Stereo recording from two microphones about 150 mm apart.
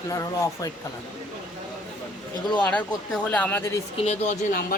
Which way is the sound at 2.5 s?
10° left (ahead or behind).